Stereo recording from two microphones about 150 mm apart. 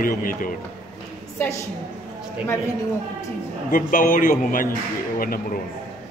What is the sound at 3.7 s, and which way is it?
A man's voice, 65° left (ahead or behind).